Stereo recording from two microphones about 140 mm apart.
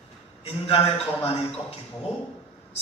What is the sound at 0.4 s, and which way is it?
Speech, 45° left (ahead or behind).